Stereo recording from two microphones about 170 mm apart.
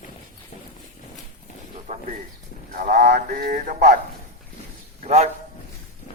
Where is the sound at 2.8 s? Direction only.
55° right (ahead or behind).